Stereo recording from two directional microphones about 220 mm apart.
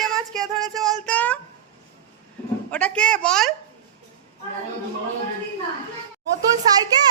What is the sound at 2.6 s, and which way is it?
Speech, 5° left (ahead or behind).